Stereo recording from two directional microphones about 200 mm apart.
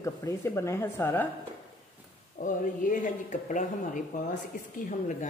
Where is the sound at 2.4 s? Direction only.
40° left (ahead or behind).